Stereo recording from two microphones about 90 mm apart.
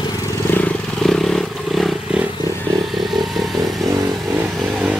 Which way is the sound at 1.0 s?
5° left (ahead or behind).